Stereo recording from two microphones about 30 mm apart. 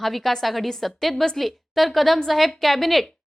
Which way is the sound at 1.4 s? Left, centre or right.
Centre.